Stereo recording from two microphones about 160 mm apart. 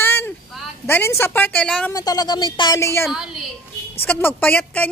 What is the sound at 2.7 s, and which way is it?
Cat, 15° left (ahead or behind).